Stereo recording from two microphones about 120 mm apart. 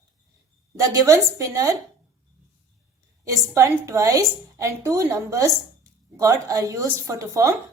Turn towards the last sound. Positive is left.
turn(degrees=-25)  # may be behind; listen again after turning